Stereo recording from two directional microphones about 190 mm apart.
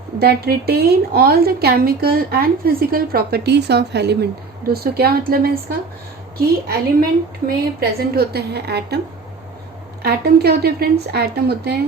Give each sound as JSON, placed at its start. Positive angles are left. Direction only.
{"t": 0.2, "sound": "a woman's voice", "side_deg": -55}
{"t": 10.0, "sound": "a woman's voice", "side_deg": -55}